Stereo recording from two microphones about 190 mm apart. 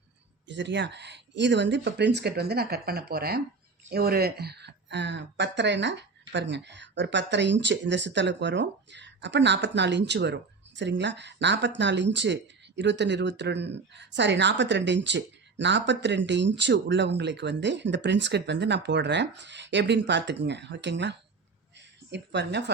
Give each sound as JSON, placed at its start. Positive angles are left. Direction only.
{"t": 0.4, "sound": "a woman's voice", "side_deg": -65}